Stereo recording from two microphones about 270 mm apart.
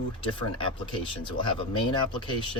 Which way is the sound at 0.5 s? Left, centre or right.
Centre.